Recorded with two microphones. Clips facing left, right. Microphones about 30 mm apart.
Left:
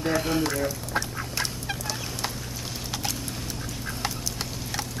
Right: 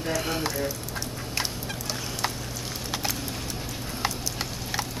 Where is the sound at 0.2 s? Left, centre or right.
Centre.